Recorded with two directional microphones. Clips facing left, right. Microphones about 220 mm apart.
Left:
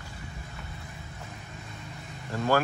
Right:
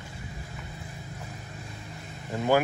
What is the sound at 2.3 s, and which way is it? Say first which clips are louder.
Speech: right 2 dB; 15° right (ahead or behind).